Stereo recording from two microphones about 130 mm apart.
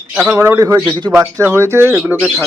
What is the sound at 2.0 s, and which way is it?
Speech, 5° right (ahead or behind).